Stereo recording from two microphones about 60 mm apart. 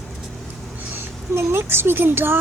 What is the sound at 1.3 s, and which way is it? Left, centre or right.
Speech, right.